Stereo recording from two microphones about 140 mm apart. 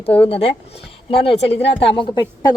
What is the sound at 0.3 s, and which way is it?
Speech, 45° left (ahead or behind).